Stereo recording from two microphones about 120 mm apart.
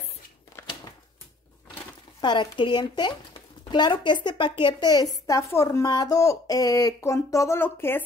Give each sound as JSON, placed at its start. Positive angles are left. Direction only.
{"t": 2.2, "sound": "a woman's voice", "side_deg": 45}
{"t": 5.2, "sound": "a woman's voice", "side_deg": 25}